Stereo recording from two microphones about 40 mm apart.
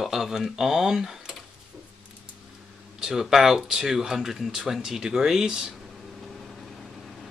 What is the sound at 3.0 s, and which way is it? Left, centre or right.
Speech, centre.